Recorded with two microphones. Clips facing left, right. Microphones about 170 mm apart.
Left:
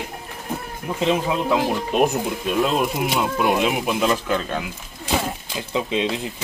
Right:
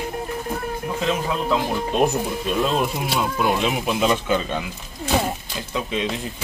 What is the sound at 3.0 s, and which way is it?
Speech, 15° left (ahead or behind).